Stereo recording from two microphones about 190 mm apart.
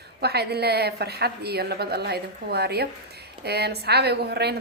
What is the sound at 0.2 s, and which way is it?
Speech, 60° right (ahead or behind).